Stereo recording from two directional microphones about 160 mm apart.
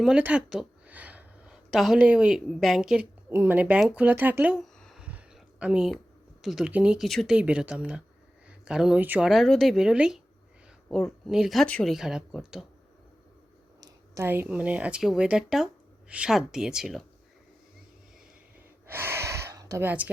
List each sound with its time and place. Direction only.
0.0 s speech: 5° right (ahead or behind)
13.8 s speech: 15° right (ahead or behind)
18.9 s gasp: 15° right (ahead or behind)